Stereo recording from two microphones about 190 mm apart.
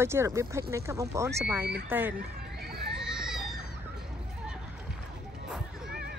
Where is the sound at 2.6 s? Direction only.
55° right (ahead or behind).